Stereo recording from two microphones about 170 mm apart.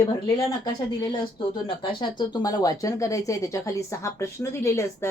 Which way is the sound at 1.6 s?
30° left (ahead or behind).